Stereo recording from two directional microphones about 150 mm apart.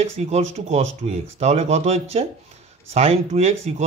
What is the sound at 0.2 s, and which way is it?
A man's voice, 45° right (ahead or behind).